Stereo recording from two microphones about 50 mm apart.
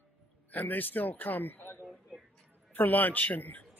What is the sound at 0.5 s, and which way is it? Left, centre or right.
A man's voice, left.